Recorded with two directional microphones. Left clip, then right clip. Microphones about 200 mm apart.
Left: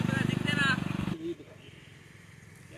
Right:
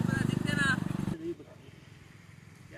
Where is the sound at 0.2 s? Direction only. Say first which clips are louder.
Left 3 dB; 65° right (ahead or behind).